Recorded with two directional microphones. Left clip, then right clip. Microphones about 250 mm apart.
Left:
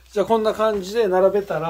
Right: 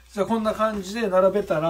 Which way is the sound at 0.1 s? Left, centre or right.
Left.